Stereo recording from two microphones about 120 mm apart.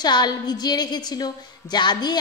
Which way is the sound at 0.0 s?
35° left (ahead or behind).